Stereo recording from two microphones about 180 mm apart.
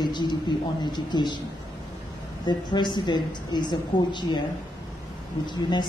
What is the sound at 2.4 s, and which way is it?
A woman's voice, 25° left (ahead or behind).